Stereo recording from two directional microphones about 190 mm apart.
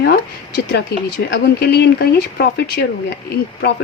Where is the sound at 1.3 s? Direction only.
60° left (ahead or behind).